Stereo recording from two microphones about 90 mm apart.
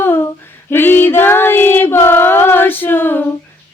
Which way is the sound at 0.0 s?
25° left (ahead or behind).